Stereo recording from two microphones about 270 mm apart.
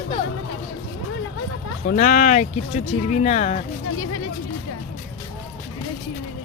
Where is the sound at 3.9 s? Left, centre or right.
Left.